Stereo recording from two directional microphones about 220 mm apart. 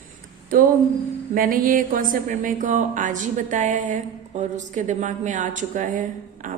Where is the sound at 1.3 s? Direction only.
40° right (ahead or behind).